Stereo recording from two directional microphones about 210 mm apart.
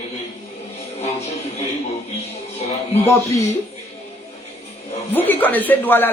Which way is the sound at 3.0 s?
15° left (ahead or behind).